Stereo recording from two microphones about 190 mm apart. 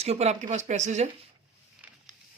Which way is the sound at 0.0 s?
35° right (ahead or behind).